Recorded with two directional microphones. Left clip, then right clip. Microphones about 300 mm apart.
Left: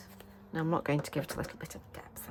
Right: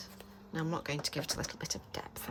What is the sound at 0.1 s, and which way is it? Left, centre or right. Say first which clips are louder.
Speech: left 2 dB; centre.